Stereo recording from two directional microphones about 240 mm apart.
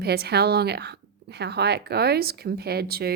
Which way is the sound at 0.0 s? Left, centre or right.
Right.